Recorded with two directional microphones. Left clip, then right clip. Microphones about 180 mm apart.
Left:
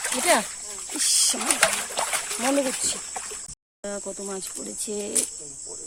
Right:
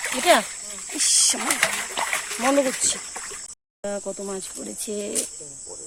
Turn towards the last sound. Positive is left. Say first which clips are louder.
# right 1 dB
turn(degrees=0)  # may be behind; listen again after turning